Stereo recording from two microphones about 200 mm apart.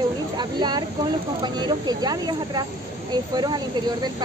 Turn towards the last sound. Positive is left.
turn(degrees=-20)  # may be behind; listen again after turning